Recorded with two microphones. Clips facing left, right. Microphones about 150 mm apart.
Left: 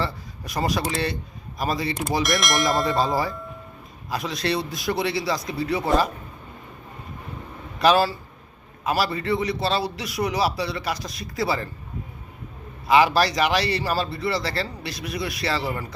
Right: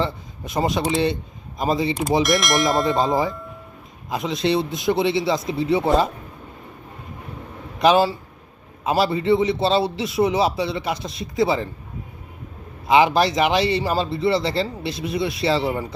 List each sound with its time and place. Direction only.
0.0 s a man's voice: 25° right (ahead or behind)
2.2 s speech: centre (ahead or behind)
4.1 s a man's voice: 20° right (ahead or behind)
7.8 s a man's voice: 20° right (ahead or behind)
12.9 s a man's voice: 25° right (ahead or behind)